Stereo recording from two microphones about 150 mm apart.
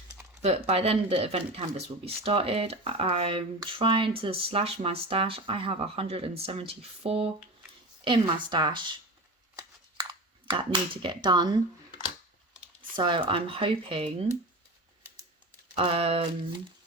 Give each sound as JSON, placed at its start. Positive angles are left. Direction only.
{"t": 0.4, "sound": "speech", "side_deg": -40}
{"t": 10.5, "sound": "speech", "side_deg": -35}
{"t": 13.0, "sound": "speech", "side_deg": -35}
{"t": 15.7, "sound": "speech", "side_deg": -40}